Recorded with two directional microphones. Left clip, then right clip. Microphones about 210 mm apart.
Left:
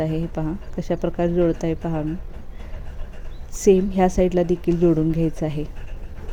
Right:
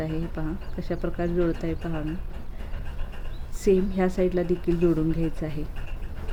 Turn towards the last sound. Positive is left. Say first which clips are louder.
# left 6 dB
turn(degrees=25)  # may be behind; listen again after turning